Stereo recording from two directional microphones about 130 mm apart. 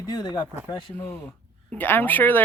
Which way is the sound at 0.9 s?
15° left (ahead or behind).